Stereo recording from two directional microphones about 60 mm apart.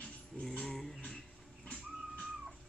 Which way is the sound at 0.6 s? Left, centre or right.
Centre.